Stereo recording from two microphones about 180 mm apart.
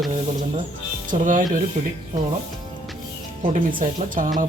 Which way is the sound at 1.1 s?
45° right (ahead or behind).